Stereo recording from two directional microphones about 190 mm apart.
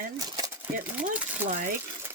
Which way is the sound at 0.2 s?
20° right (ahead or behind).